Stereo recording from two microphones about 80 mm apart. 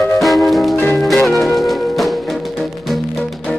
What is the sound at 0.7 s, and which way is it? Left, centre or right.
Music, left.